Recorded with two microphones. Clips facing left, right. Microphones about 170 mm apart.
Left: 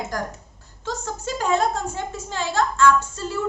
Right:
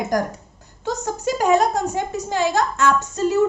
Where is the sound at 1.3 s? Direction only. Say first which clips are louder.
Right 5 dB; 15° right (ahead or behind).